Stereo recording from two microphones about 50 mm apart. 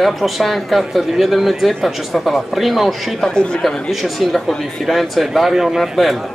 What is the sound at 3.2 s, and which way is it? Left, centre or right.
Speech, centre.